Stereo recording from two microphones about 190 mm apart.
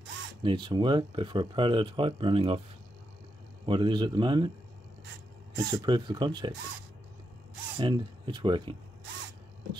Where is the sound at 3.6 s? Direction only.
25° right (ahead or behind).